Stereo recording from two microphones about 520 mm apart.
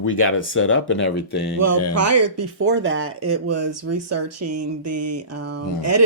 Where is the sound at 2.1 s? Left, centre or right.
Right.